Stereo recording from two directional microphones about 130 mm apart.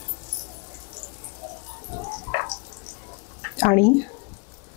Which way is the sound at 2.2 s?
20° left (ahead or behind).